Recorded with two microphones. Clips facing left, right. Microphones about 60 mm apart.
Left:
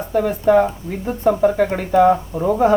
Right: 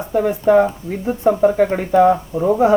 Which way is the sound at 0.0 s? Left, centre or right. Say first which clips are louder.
Right 1 dB; centre.